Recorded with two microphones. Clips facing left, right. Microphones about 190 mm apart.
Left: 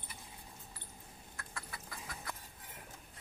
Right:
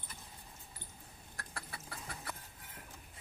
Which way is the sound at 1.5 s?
30° right (ahead or behind).